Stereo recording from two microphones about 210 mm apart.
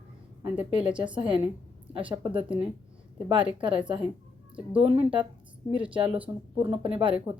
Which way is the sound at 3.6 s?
25° right (ahead or behind).